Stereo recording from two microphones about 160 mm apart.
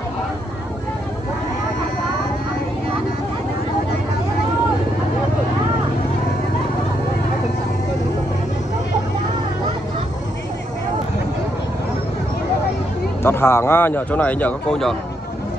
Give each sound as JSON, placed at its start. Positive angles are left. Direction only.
{"t": 13.2, "sound": "a man's voice", "side_deg": 15}